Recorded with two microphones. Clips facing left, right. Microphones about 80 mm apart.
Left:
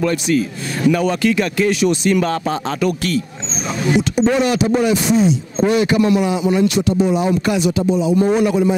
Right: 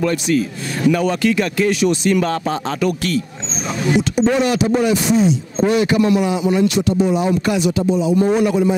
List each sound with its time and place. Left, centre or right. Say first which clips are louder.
0.8 s a man's voice: even; centre